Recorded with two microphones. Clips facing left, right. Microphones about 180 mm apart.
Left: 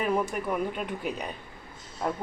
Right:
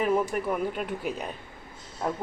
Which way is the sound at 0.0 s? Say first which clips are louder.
Right 2 dB; centre (ahead or behind).